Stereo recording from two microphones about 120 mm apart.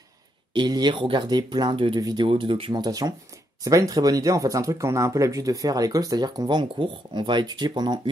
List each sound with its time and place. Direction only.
0.5 s speech: 40° right (ahead or behind)
2.8 s speech: 30° right (ahead or behind)